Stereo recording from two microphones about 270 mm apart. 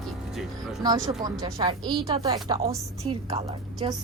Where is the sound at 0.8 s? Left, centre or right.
Centre.